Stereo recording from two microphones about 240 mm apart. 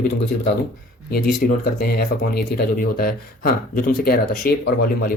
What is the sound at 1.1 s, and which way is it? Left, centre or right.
Speech, left.